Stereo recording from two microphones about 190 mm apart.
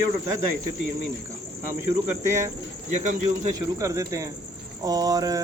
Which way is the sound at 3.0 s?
40° right (ahead or behind).